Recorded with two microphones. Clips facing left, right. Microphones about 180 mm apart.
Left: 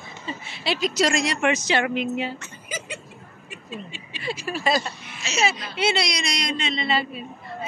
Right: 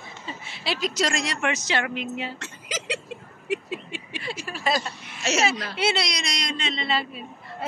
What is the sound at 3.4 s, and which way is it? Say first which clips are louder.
Speech: right 8 dB; 85° right.